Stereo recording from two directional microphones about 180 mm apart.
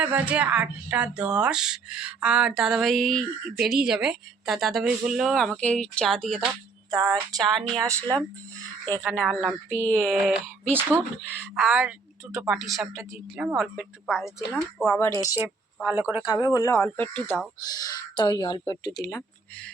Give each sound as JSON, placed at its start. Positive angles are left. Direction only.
{"t": 0.0, "sound": "speech", "side_deg": -5}
{"t": 6.9, "sound": "a sound", "side_deg": -20}
{"t": 7.4, "sound": "speech", "side_deg": 0}
{"t": 7.9, "sound": "speech", "side_deg": -15}
{"t": 9.3, "sound": "speech", "side_deg": -5}
{"t": 9.7, "sound": "speech", "side_deg": 10}
{"t": 10.7, "sound": "speech", "side_deg": -10}
{"t": 14.8, "sound": "speech", "side_deg": 15}
{"t": 15.8, "sound": "speech", "side_deg": -10}
{"t": 16.2, "sound": "speech", "side_deg": 20}
{"t": 17.7, "sound": "speech", "side_deg": 20}